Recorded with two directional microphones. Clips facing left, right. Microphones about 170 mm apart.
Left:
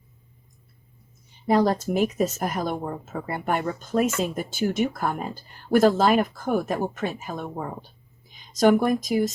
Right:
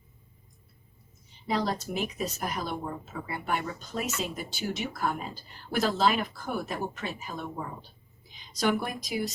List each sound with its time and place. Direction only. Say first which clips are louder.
1.5 s a woman's voice: left 9 dB; 50° left (ahead or behind)